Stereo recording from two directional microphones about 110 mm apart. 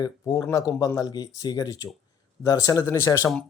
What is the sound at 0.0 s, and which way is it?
Speech, 35° left (ahead or behind).